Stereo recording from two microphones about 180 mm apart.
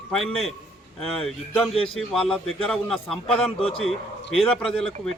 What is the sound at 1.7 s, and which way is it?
Speech, 30° left (ahead or behind).